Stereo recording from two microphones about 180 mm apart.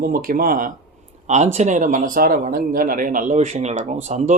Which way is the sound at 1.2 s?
40° right (ahead or behind).